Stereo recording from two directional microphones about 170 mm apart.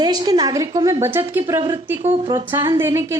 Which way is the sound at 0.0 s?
25° right (ahead or behind).